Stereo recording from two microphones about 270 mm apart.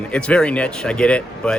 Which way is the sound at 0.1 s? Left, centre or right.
Centre.